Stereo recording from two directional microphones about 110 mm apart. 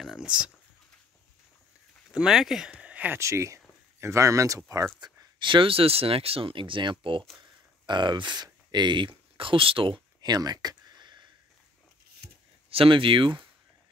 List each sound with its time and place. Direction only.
0.0 s speech: 5° right (ahead or behind)
2.0 s speech: 5° right (ahead or behind)
3.2 s speech: 25° right (ahead or behind)
5.0 s speech: 45° right (ahead or behind)
10.2 s a sound: 40° right (ahead or behind)
12.6 s speech: 55° right (ahead or behind)